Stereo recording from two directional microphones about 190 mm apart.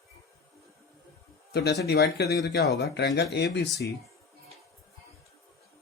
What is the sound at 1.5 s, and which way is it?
Speech, 60° left (ahead or behind).